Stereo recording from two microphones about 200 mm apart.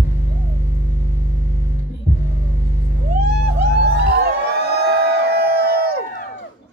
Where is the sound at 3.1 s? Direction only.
55° right (ahead or behind).